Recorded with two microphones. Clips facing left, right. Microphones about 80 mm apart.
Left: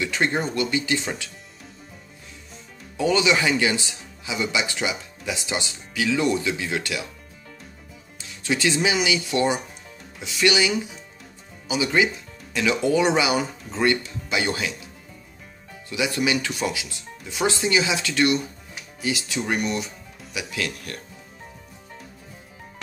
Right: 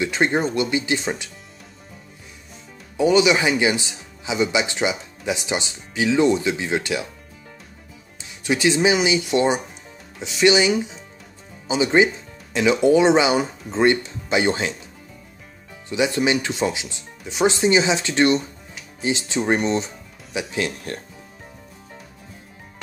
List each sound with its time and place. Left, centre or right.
0.0 s speech: right
3.0 s speech: centre
8.2 s speech: right
15.9 s speech: right